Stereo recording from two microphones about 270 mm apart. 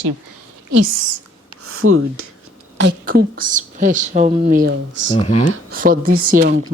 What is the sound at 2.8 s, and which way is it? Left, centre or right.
Speech, right.